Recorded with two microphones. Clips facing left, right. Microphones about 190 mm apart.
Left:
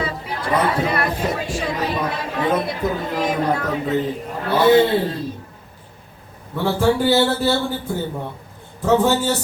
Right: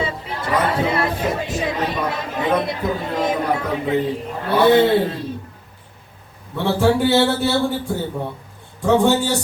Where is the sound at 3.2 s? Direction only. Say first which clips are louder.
Even; 25° right (ahead or behind).